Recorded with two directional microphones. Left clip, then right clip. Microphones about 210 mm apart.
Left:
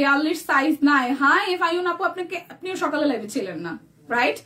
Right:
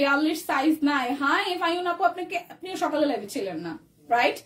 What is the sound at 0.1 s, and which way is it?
A woman's voice, 15° left (ahead or behind).